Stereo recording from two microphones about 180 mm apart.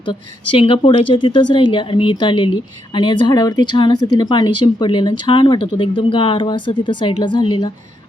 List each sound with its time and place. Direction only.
0.0 s a woman's voice: 25° left (ahead or behind)